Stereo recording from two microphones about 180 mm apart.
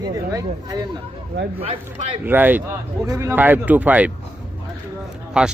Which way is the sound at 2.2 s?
10° right (ahead or behind).